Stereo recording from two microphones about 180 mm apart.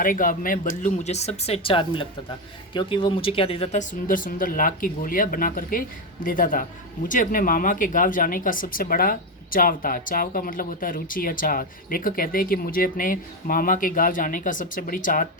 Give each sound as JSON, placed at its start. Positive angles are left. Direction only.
{"t": 0.0, "sound": "speech", "side_deg": 50}